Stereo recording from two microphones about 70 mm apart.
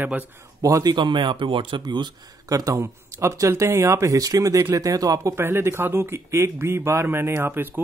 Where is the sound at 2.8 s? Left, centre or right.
Right.